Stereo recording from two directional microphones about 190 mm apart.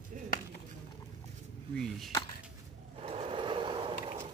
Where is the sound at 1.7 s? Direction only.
5° left (ahead or behind).